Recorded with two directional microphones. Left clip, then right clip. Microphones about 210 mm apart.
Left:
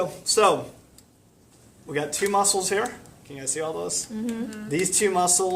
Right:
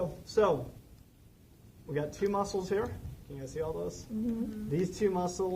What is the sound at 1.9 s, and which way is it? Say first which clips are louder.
Speech: left 8 dB; 20° left (ahead or behind).